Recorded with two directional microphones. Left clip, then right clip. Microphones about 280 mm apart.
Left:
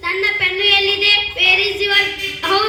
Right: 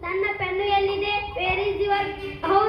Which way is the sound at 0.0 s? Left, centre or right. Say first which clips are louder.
Left 9 dB; left.